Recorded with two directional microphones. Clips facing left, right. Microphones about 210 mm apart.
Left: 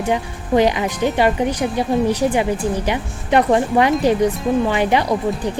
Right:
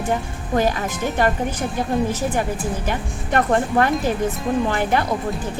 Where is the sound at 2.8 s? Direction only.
15° left (ahead or behind).